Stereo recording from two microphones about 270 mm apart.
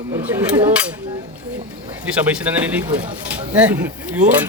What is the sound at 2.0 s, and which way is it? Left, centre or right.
Speech, centre.